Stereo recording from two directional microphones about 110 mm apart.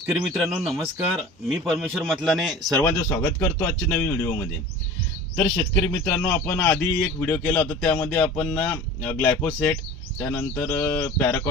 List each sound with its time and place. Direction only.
0.2 s speech: centre (ahead or behind)
3.0 s a man's voice: 25° left (ahead or behind)
5.5 s a man's voice: 30° left (ahead or behind)